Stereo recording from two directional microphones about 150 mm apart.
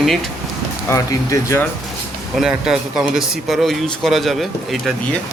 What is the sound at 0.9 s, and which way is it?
Speech, 20° left (ahead or behind).